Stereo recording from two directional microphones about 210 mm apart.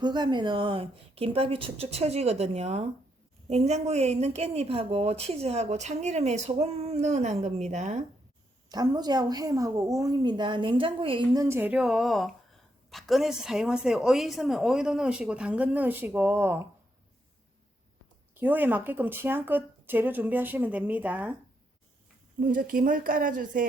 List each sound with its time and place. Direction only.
0.0 s a woman's voice: 20° right (ahead or behind)
8.7 s a woman's voice: 20° right (ahead or behind)
18.3 s speech: 10° right (ahead or behind)
22.5 s a woman's voice: 40° right (ahead or behind)